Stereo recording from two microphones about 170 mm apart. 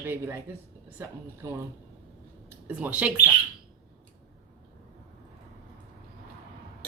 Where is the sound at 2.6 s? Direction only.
10° right (ahead or behind).